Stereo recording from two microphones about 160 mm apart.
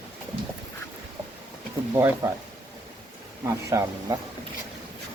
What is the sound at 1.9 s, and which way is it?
Speech, 15° right (ahead or behind).